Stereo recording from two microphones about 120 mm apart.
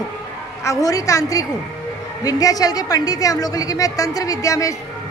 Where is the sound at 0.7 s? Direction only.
30° left (ahead or behind).